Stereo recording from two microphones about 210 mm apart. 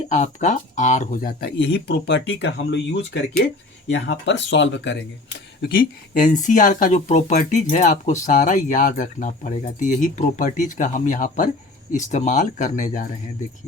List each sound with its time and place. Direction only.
0.1 s speech: 35° left (ahead or behind); by 5.0 s 60° left (ahead or behind)
5.6 s speech: 40° left (ahead or behind)